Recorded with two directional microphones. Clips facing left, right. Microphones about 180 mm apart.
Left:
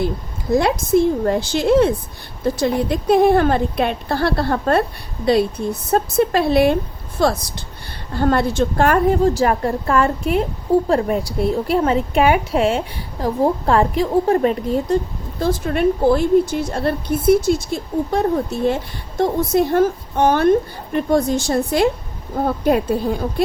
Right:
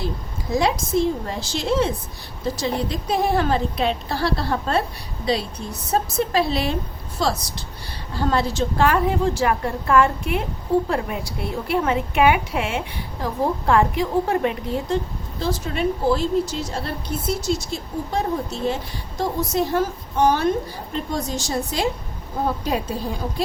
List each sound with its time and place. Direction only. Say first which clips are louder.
0.5 s a woman's voice: left 5 dB; 55° left (ahead or behind)
8.1 s a woman's voice: left 5 dB; 55° left (ahead or behind); by 14.9 s 40° left (ahead or behind)
15.4 s a woman's voice: left 5 dB; 55° left (ahead or behind)